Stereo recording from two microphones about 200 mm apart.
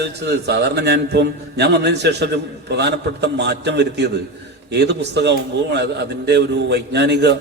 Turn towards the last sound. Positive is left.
turn(degrees=-60)  # may be behind; listen again after turning